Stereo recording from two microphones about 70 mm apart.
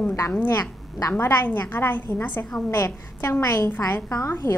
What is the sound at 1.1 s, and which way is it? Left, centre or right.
A woman's voice, left.